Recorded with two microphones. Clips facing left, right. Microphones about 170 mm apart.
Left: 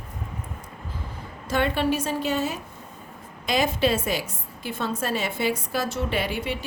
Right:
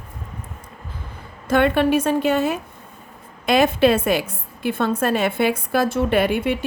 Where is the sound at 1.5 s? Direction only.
60° right (ahead or behind).